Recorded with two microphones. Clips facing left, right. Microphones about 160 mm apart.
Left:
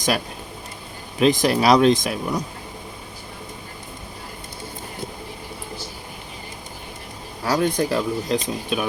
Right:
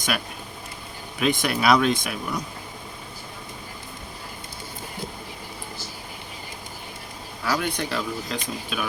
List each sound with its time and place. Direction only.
1.2 s speech: 35° left (ahead or behind)
7.4 s speech: 35° left (ahead or behind)